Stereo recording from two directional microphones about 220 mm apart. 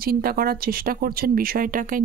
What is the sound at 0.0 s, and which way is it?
Speech, 45° right (ahead or behind).